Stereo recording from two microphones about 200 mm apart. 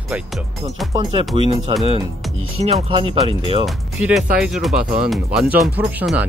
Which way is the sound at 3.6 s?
Centre (ahead or behind).